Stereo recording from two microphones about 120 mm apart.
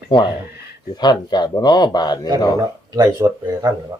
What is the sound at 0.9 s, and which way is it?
A man's voice, 35° left (ahead or behind).